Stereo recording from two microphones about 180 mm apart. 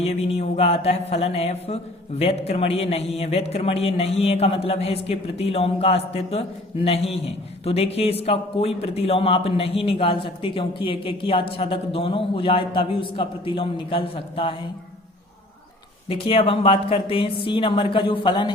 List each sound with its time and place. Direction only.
0.0 s a man's voice: 35° left (ahead or behind)
16.0 s a man's voice: 30° left (ahead or behind)